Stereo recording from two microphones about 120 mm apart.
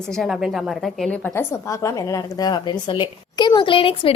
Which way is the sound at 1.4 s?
25° left (ahead or behind).